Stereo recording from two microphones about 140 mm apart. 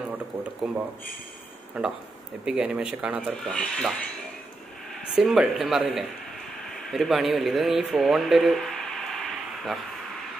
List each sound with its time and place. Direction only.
0.6 s speech: 5° right (ahead or behind)
3.3 s speech: 5° left (ahead or behind)
5.1 s speech: 5° right (ahead or behind)